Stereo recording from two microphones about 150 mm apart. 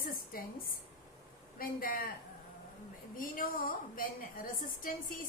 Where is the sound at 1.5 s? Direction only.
75° left (ahead or behind).